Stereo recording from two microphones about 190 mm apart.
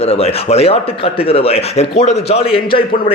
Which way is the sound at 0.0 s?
30° left (ahead or behind).